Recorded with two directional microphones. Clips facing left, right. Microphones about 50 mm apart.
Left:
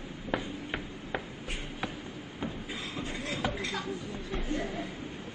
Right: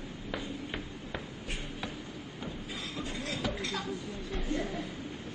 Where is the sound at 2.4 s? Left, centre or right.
Left.